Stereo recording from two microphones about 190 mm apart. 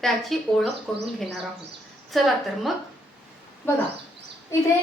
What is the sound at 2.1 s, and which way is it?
Speech, centre (ahead or behind).